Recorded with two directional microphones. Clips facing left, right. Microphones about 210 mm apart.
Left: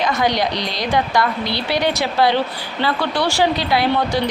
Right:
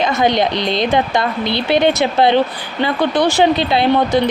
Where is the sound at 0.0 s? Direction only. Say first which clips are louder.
Right 4 dB; 25° right (ahead or behind).